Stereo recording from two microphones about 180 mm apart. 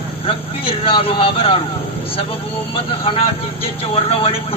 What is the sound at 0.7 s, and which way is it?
Speech, 30° left (ahead or behind).